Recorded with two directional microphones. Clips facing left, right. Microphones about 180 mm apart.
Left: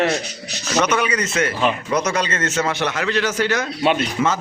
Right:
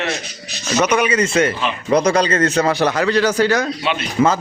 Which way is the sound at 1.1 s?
30° right (ahead or behind).